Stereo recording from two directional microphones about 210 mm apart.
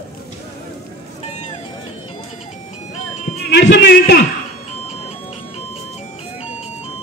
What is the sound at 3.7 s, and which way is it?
Speech, 55° left (ahead or behind).